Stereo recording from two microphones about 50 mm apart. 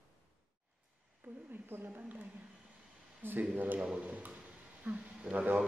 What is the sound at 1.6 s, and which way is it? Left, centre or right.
Speech, right.